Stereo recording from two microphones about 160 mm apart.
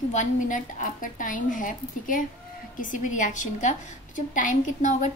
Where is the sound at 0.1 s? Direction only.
50° left (ahead or behind).